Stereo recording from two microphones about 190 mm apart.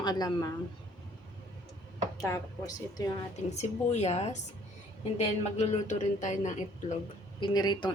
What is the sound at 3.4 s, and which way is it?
A man's voice, 35° left (ahead or behind).